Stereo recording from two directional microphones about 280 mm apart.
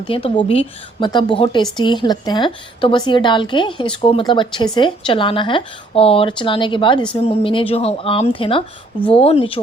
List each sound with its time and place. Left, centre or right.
0.0 s speech: centre